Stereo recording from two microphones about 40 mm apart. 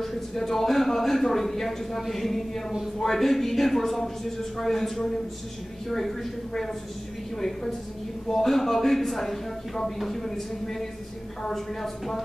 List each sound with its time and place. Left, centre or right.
0.0 s speech: centre